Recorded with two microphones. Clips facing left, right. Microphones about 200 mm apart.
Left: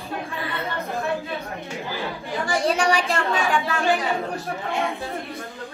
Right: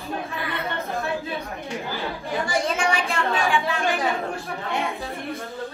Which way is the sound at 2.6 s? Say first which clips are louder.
Left 3 dB; 35° left (ahead or behind).